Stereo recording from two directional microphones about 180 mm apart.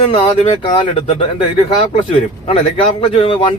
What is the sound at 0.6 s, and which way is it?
Speech, 30° left (ahead or behind).